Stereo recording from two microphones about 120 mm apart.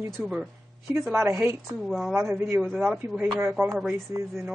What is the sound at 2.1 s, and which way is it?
Speech, 20° right (ahead or behind).